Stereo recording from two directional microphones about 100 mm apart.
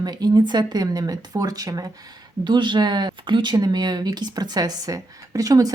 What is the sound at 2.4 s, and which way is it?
Speech, 50° right (ahead or behind).